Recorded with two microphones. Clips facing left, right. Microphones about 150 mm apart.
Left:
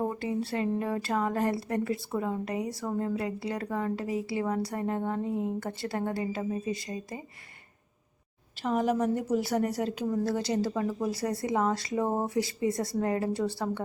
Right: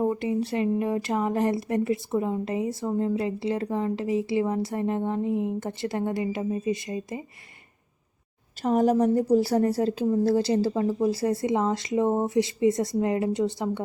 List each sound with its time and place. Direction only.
0.1 s speech: 20° right (ahead or behind)
8.6 s a woman's voice: 40° right (ahead or behind); by 13.8 s 20° right (ahead or behind)